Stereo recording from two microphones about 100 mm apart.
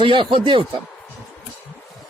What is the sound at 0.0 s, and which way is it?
Speech, 55° right (ahead or behind).